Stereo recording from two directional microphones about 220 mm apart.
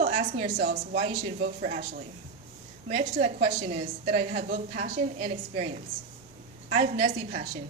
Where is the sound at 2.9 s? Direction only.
30° right (ahead or behind).